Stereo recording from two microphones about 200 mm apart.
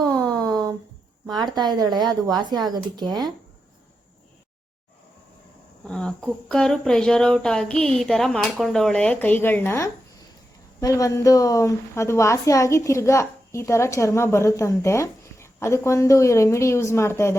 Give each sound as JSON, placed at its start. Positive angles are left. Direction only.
{"t": 0.0, "sound": "a sound", "side_deg": -20}
{"t": 1.5, "sound": "speech", "side_deg": -20}
{"t": 5.9, "sound": "a woman's voice", "side_deg": 5}